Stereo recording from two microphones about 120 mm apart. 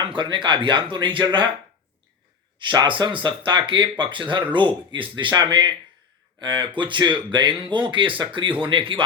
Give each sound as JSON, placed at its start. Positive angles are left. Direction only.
{"t": 0.0, "sound": "speech", "side_deg": -40}
{"t": 2.6, "sound": "speech", "side_deg": -40}